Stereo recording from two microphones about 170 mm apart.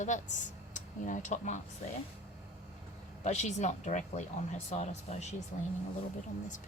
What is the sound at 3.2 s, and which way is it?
A woman's voice, 40° left (ahead or behind).